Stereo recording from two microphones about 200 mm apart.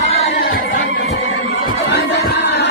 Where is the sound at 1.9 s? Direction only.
55° left (ahead or behind).